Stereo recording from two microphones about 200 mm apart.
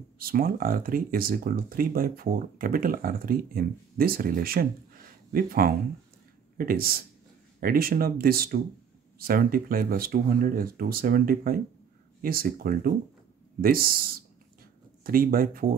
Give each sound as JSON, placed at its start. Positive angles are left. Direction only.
{"t": 0.2, "sound": "speech", "side_deg": -45}